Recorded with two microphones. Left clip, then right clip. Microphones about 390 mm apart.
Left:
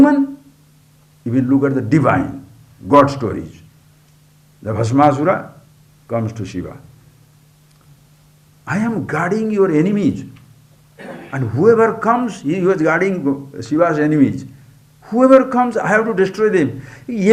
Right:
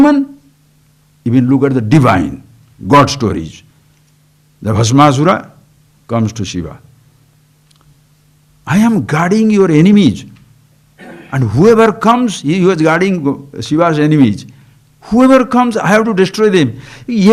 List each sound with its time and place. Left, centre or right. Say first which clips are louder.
1.2 s a man's voice: right 4 dB; right
4.6 s a man's voice: right 4 dB; right
8.6 s a man's voice: right 7 dB; right
11.3 s a man's voice: right 4 dB; right